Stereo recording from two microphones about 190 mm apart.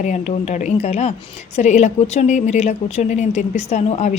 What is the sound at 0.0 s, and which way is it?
A woman's voice, 40° left (ahead or behind).